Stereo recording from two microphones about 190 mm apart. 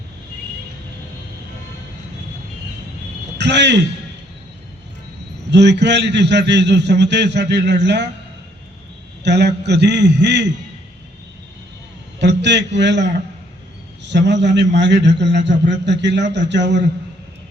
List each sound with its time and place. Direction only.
3.3 s a man's voice: 65° right (ahead or behind)
5.5 s a man's voice: 65° right (ahead or behind)
9.2 s a man's voice: 60° right (ahead or behind)
12.2 s a man's voice: 65° right (ahead or behind)